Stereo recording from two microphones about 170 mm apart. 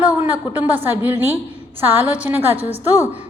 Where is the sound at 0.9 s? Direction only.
15° right (ahead or behind).